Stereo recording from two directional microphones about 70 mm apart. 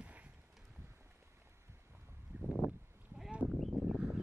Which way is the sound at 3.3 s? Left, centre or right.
Centre.